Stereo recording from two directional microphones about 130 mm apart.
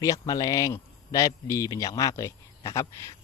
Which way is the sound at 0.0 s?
30° left (ahead or behind).